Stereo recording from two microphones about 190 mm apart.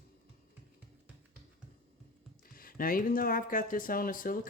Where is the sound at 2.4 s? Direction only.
50° left (ahead or behind).